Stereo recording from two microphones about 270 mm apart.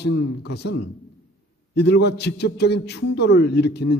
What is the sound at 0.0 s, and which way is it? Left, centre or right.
A man's voice, left.